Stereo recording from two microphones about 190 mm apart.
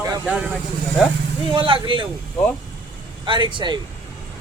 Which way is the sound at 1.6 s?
25° right (ahead or behind).